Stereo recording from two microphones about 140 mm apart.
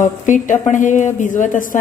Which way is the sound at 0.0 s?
65° left (ahead or behind).